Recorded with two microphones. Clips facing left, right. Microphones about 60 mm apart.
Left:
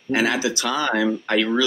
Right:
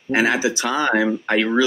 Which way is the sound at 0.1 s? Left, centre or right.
Centre.